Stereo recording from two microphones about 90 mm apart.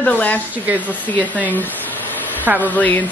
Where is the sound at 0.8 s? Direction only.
20° left (ahead or behind).